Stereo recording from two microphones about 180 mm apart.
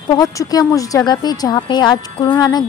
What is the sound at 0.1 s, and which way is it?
A woman's voice, 20° left (ahead or behind).